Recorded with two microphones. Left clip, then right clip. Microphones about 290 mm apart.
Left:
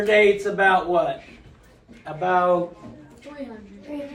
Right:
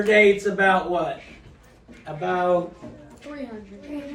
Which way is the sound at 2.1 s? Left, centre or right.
Left.